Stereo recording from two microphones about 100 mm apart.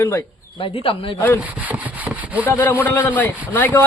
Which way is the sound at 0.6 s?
70° left (ahead or behind).